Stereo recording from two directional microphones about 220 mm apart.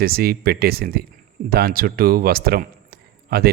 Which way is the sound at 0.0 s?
45° right (ahead or behind).